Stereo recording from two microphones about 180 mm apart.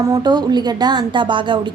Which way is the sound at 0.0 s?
20° right (ahead or behind).